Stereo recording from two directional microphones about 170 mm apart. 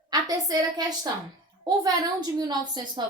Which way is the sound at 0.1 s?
20° right (ahead or behind).